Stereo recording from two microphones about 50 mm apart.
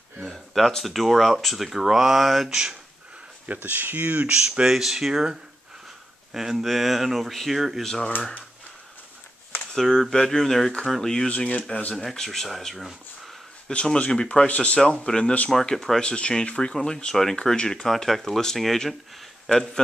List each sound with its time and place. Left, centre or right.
0.2 s speech: centre
3.4 s speech: right
4.3 s speech: centre
9.8 s speech: centre
11.2 s speech: left
12.0 s speech: centre
13.9 s speech: centre
15.6 s speech: centre
16.0 s speech: centre